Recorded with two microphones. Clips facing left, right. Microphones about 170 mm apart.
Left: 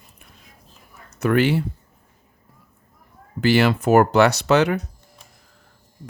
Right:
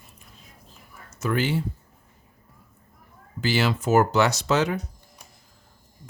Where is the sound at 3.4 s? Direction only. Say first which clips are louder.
Left 6 dB; 60° left (ahead or behind).